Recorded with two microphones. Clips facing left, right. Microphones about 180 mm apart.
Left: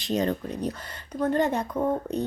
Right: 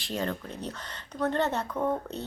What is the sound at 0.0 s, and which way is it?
Speech, 20° left (ahead or behind).